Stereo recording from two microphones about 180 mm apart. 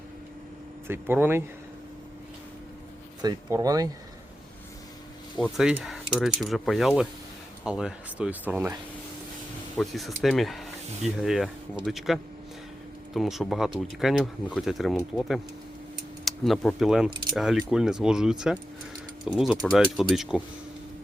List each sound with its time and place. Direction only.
0.9 s speech: 10° right (ahead or behind)
3.2 s speech: 20° right (ahead or behind)
5.4 s speech: centre (ahead or behind)
9.7 s speech: centre (ahead or behind)